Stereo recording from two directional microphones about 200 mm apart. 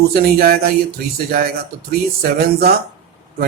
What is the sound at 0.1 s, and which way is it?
Speech, 50° right (ahead or behind).